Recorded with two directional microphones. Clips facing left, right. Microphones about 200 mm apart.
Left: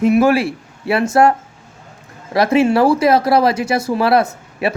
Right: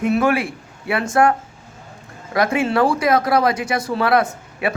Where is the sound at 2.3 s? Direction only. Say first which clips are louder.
Left 5 dB; 25° left (ahead or behind).